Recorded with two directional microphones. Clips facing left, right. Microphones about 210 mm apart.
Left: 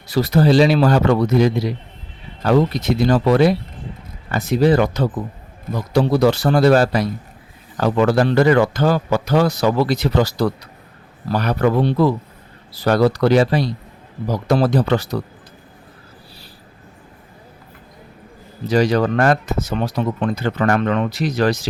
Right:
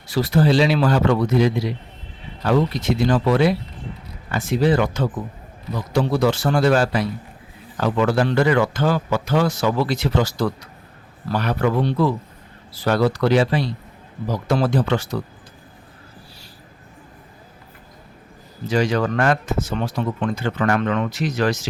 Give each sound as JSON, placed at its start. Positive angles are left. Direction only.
{"t": 0.1, "sound": "speech", "side_deg": 40}
{"t": 18.7, "sound": "speech", "side_deg": 35}